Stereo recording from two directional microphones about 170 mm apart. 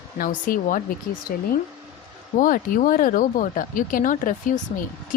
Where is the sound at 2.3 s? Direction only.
50° left (ahead or behind).